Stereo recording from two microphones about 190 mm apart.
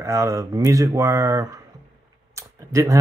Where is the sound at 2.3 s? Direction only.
15° right (ahead or behind).